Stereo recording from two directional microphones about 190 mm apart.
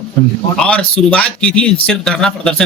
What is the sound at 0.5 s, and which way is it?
Speech, 5° left (ahead or behind).